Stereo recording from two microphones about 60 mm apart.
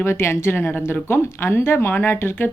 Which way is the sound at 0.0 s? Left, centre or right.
Left.